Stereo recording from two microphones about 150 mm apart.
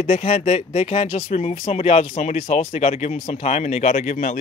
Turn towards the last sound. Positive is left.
turn(degrees=55)  # may be behind; listen again after turning